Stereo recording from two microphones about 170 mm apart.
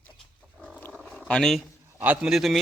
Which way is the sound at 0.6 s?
10° left (ahead or behind).